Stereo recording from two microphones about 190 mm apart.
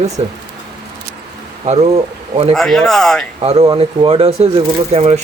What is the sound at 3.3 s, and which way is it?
Speech, 30° right (ahead or behind).